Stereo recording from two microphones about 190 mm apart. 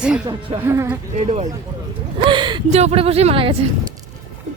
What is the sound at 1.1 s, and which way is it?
Speech, 35° right (ahead or behind).